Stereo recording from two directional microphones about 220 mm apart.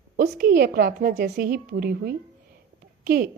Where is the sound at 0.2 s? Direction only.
40° right (ahead or behind).